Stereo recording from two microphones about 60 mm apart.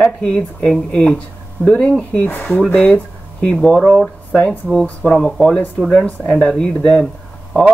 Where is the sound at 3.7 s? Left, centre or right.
Centre.